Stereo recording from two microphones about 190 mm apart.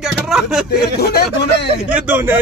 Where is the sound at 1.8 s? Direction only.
5° right (ahead or behind).